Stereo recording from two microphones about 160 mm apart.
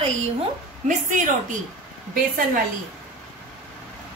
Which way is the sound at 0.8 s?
55° right (ahead or behind).